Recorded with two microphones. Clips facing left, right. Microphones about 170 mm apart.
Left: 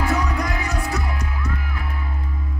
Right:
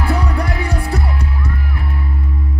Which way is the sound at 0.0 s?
30° right (ahead or behind).